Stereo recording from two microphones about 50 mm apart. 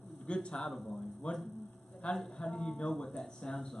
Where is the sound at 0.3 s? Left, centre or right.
Centre.